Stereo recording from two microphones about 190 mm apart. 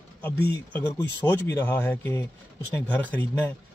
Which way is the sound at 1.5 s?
10° left (ahead or behind).